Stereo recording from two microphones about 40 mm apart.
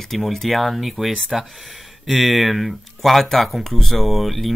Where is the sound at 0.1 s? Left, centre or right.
Centre.